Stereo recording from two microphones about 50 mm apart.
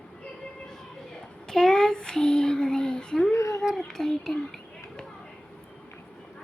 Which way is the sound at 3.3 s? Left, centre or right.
Left.